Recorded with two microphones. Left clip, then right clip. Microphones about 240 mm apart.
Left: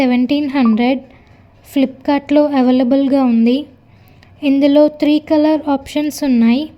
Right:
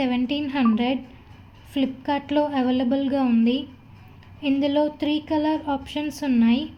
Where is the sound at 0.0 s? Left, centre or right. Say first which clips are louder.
Left 10 dB; left.